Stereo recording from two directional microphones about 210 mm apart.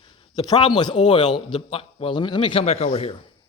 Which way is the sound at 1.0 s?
20° left (ahead or behind).